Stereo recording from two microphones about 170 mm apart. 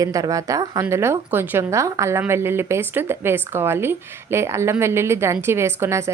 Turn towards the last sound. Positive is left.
turn(degrees=-15)  # may be behind; listen again after turning